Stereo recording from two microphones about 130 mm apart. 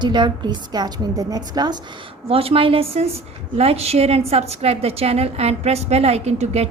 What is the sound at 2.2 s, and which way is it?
A woman's voice, 45° right (ahead or behind).